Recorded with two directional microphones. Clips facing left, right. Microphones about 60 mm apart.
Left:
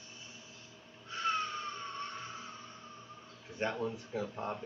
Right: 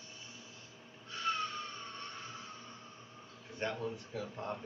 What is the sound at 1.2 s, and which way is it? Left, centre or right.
Wheeze, centre.